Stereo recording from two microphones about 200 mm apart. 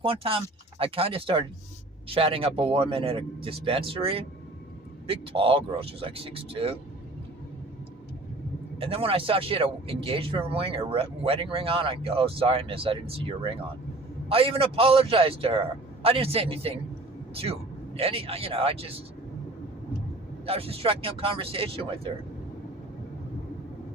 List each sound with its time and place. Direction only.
0.0 s speech: 25° right (ahead or behind)
8.8 s speech: 30° right (ahead or behind)
20.5 s speech: 30° right (ahead or behind)